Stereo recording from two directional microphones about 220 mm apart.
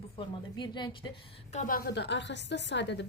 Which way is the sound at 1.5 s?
35° left (ahead or behind).